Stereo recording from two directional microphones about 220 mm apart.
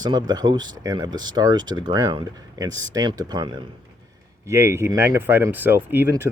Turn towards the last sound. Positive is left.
turn(degrees=-10)  # may be behind; listen again after turning